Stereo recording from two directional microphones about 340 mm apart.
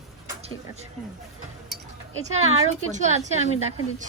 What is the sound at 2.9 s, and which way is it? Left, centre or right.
Speech, right.